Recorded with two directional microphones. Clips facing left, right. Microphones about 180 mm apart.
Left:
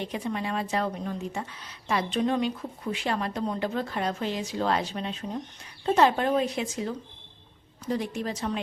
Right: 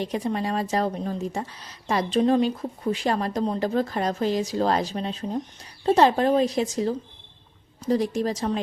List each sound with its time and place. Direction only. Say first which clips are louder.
0.0 s a woman's voice: right 5 dB; 40° right (ahead or behind)